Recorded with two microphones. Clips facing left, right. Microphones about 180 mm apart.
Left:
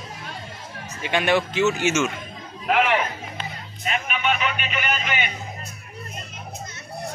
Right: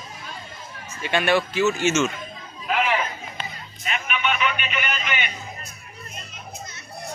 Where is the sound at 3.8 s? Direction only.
40° left (ahead or behind).